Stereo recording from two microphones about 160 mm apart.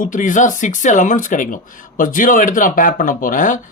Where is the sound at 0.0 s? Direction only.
55° left (ahead or behind).